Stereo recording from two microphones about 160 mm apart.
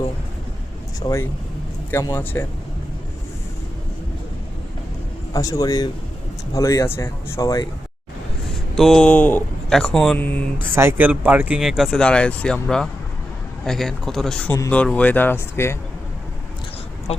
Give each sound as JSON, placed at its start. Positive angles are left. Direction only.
{"t": 0.9, "sound": "speech", "side_deg": 20}
{"t": 5.3, "sound": "speech", "side_deg": 20}
{"t": 8.7, "sound": "speech", "side_deg": 5}
{"t": 10.6, "sound": "speech", "side_deg": -15}
{"t": 17.1, "sound": "a woman's voice", "side_deg": 40}